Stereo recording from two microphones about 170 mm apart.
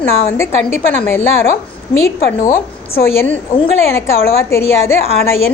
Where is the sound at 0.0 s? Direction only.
15° left (ahead or behind).